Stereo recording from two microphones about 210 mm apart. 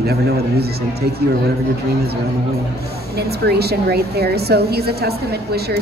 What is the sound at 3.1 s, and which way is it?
A woman's voice, 50° right (ahead or behind).